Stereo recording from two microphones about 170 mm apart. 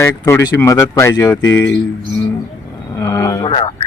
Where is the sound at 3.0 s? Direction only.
20° left (ahead or behind).